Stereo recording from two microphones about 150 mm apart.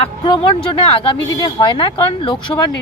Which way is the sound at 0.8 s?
35° left (ahead or behind).